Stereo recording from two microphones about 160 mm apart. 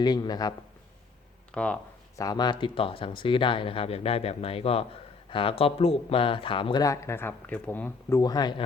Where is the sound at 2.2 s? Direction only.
25° left (ahead or behind).